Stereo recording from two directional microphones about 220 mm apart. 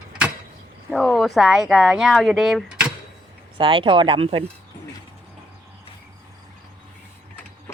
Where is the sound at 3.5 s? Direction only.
25° right (ahead or behind).